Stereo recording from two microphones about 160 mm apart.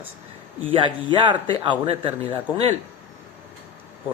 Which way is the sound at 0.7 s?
35° right (ahead or behind).